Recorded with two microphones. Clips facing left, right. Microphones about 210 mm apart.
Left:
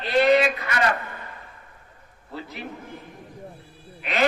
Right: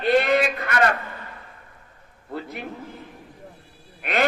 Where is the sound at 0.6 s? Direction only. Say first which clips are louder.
Right 3 dB; 55° right (ahead or behind).